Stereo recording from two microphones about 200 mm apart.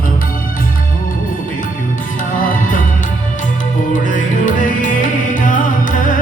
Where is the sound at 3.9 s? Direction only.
40° left (ahead or behind).